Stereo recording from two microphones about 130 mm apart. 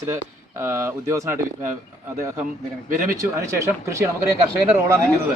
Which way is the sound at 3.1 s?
25° right (ahead or behind).